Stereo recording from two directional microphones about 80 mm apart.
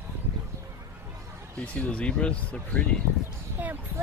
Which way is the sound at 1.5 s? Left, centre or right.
Centre.